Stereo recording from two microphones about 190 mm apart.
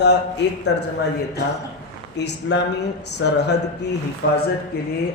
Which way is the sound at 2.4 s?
90° left.